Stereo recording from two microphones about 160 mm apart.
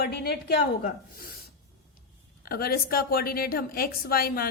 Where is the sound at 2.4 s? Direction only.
70° left (ahead or behind).